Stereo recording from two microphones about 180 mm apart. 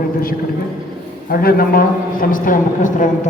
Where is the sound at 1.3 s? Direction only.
55° left (ahead or behind).